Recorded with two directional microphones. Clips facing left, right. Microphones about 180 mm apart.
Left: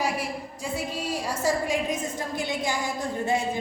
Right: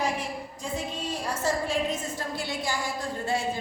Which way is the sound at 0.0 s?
10° left (ahead or behind).